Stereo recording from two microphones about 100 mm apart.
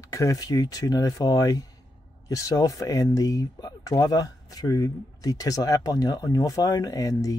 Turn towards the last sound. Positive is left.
turn(degrees=35)  # may be behind; listen again after turning